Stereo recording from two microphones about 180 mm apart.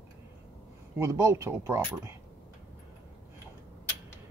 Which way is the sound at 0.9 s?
15° right (ahead or behind).